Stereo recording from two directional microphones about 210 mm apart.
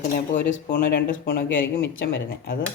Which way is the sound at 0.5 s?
55° left (ahead or behind).